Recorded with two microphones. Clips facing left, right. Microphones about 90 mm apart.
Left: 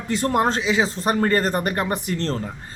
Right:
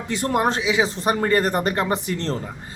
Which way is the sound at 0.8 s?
20° right (ahead or behind).